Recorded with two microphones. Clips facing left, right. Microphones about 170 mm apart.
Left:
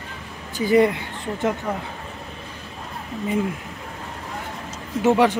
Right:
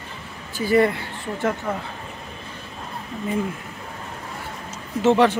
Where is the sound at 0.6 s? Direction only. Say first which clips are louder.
Left 1 dB; 20° left (ahead or behind).